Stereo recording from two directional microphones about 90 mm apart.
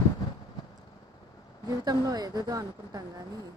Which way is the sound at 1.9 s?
45° right (ahead or behind).